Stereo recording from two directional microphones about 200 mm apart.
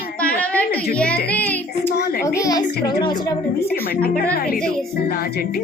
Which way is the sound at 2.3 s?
15° left (ahead or behind).